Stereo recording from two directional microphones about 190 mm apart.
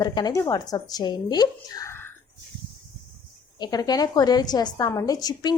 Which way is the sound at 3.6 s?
20° left (ahead or behind).